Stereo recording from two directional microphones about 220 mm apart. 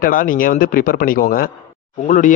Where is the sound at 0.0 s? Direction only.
40° left (ahead or behind).